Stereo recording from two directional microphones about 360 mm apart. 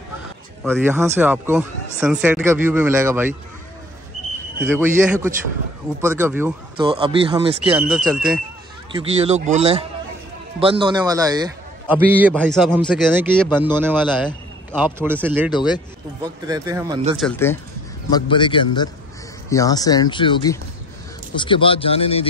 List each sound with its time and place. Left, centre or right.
0.7 s a man's voice: centre
4.6 s a man's voice: centre
7.9 s a man's voice: centre
8.9 s a man's voice: centre
17.2 s a man's voice: centre